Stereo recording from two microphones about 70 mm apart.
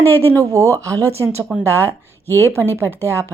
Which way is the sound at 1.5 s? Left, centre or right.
Right.